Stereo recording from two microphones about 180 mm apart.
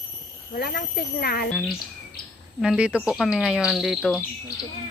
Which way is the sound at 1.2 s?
60° left (ahead or behind).